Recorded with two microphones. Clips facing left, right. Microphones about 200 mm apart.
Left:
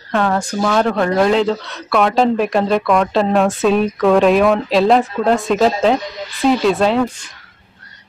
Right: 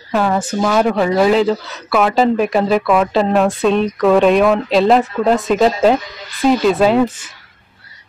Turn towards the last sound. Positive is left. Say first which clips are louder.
# right 2 dB
turn(degrees=-5)  # may be behind; listen again after turning